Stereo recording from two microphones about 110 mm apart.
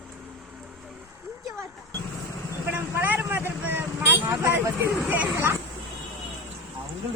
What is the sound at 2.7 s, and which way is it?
Vehicle, 15° right (ahead or behind).